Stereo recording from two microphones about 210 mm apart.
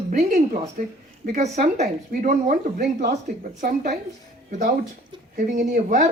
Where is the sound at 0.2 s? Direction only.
35° right (ahead or behind).